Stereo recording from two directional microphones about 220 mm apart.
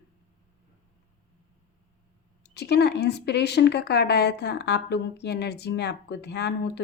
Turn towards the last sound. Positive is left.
turn(degrees=50)  # may be behind; listen again after turning